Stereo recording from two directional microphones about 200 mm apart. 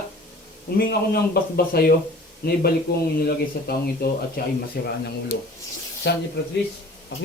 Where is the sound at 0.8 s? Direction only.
50° left (ahead or behind).